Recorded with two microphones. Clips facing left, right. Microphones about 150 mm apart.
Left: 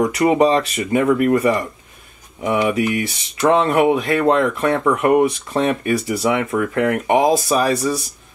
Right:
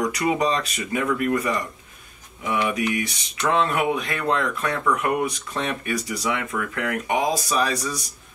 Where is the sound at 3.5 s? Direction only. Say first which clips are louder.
Left 7 dB; 25° left (ahead or behind).